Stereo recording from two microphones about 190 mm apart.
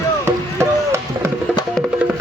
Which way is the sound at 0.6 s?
15° right (ahead or behind).